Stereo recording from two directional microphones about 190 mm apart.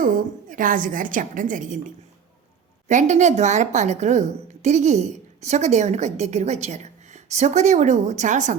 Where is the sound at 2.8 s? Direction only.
40° right (ahead or behind).